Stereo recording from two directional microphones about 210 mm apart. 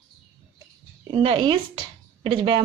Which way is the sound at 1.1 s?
25° right (ahead or behind).